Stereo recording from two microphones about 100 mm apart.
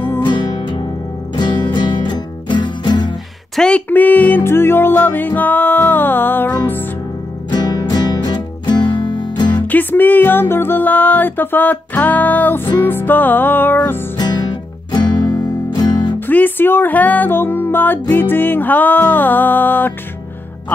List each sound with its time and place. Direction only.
0.2 s music: 50° left (ahead or behind)
3.5 s music: 10° left (ahead or behind)
7.5 s music: 45° left (ahead or behind)
9.7 s music: 20° left (ahead or behind)
14.1 s music: 45° left (ahead or behind)
16.3 s music: 20° left (ahead or behind)